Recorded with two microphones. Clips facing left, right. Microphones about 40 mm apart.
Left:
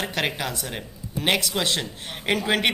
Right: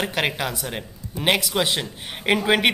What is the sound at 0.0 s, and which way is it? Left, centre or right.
A woman's voice, centre.